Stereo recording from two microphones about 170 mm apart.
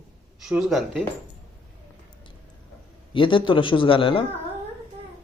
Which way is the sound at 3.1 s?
30° left (ahead or behind).